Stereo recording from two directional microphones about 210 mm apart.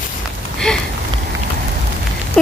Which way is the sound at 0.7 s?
5° left (ahead or behind).